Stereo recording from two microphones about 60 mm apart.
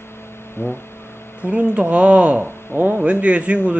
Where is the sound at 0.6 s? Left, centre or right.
Left.